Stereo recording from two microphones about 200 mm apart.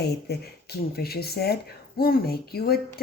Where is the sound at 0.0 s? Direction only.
55° left (ahead or behind).